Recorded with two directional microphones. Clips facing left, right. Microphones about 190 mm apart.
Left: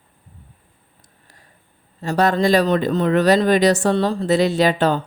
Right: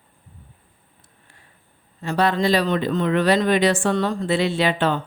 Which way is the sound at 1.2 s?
40° left (ahead or behind).